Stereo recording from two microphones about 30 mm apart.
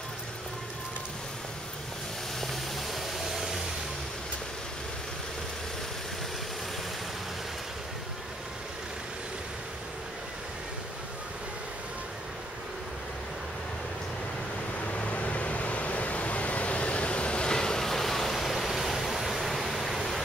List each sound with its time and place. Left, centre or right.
14.9 s vehicle: left
17.5 s train: left
17.8 s a sound: centre